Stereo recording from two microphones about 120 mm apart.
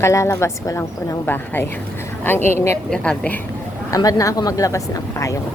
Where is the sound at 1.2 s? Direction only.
15° left (ahead or behind).